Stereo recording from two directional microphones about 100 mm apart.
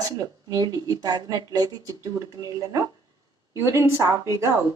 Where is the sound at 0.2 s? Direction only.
40° right (ahead or behind).